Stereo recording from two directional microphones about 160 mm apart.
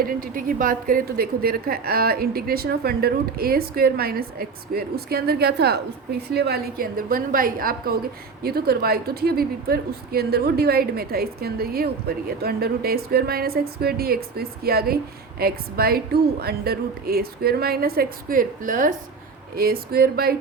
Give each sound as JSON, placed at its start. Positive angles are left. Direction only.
{"t": 0.0, "sound": "a woman's voice", "side_deg": -60}
{"t": 8.4, "sound": "a woman's voice", "side_deg": -75}
{"t": 19.5, "sound": "a woman's voice", "side_deg": -70}